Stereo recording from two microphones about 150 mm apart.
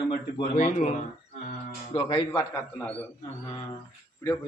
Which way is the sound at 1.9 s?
35° left (ahead or behind).